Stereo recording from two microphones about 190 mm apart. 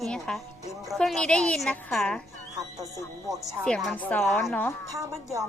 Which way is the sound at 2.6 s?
20° right (ahead or behind).